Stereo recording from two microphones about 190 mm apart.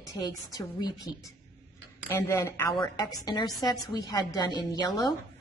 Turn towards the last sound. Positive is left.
turn(degrees=20)  # may be behind; listen again after turning